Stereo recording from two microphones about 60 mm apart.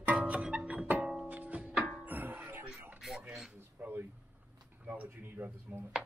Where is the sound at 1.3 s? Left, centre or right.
Right.